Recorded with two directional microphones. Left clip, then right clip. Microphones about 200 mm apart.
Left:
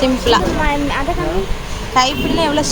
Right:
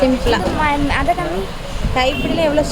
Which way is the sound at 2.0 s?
5° right (ahead or behind).